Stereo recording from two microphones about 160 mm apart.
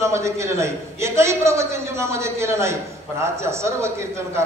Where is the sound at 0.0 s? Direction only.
20° right (ahead or behind).